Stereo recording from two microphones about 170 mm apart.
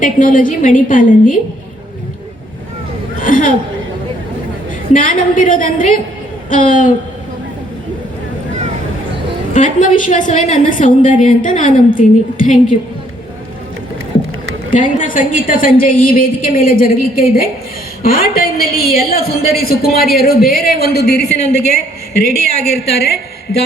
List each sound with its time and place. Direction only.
0.0 s a woman's voice: 50° left (ahead or behind)
3.2 s a woman's voice: 50° left (ahead or behind)
4.9 s a woman's voice: 50° left (ahead or behind)
9.5 s a woman's voice: 50° left (ahead or behind)
14.8 s a woman's voice: 50° left (ahead or behind)